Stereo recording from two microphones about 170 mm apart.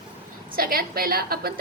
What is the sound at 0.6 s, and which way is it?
Speech, 60° right (ahead or behind).